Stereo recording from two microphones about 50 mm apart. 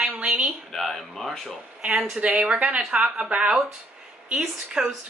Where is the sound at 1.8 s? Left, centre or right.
Right.